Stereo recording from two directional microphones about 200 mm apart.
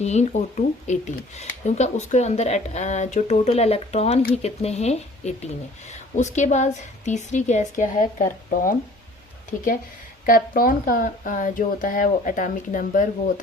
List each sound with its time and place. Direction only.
0.0 s speech: 35° left (ahead or behind)
10.2 s speech: 45° left (ahead or behind)